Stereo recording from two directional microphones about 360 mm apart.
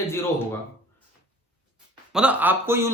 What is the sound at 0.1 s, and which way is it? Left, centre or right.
Speech, centre.